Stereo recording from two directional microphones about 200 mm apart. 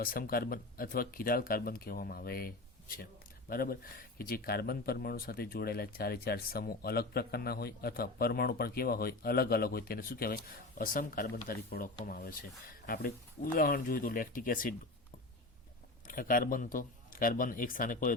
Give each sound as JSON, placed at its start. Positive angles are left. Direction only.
{"t": 0.0, "sound": "speech", "side_deg": 45}
{"t": 3.5, "sound": "speech", "side_deg": 45}
{"t": 16.0, "sound": "speech", "side_deg": 45}